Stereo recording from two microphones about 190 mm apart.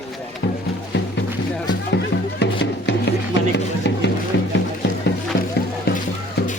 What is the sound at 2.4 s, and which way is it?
Music, 65° left (ahead or behind).